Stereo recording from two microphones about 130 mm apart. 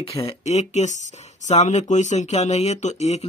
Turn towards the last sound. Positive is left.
turn(degrees=60)  # may be behind; listen again after turning